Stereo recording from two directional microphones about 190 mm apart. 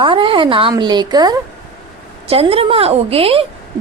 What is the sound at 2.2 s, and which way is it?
A woman's voice, 30° right (ahead or behind).